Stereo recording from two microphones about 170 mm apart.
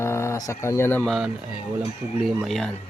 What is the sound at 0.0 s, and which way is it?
Speech, 15° left (ahead or behind).